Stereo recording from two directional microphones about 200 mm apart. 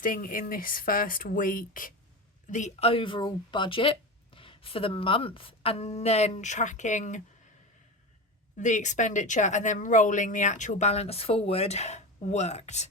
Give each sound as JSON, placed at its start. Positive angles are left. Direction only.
{"t": 0.0, "sound": "speech", "side_deg": 45}
{"t": 8.5, "sound": "speech", "side_deg": 35}